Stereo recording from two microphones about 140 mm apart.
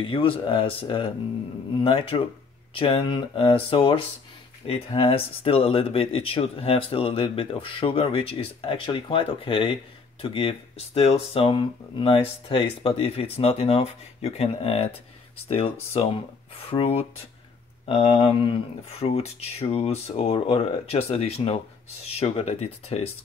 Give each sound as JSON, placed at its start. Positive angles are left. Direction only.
{"t": 0.0, "sound": "speech", "side_deg": 35}